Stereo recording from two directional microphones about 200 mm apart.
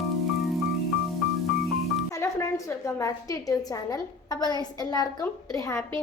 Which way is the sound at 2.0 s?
15° left (ahead or behind).